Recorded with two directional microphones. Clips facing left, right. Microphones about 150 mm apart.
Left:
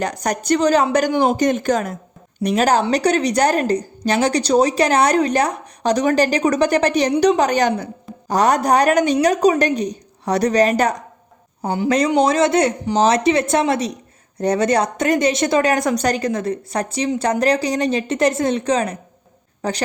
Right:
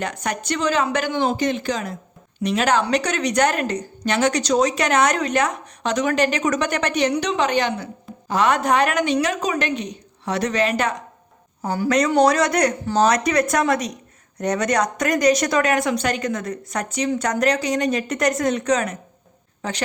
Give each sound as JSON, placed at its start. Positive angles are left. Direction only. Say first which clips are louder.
{"t": 0.0, "sound": "a woman's voice", "louder": "left 4 dB", "side_deg": 40}
{"t": 11.6, "sound": "a woman's voice", "louder": "left 2 dB", "side_deg": 20}